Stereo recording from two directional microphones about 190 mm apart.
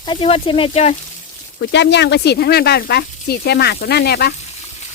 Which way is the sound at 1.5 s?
70° left (ahead or behind).